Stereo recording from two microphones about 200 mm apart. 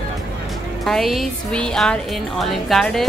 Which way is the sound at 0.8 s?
Centre (ahead or behind).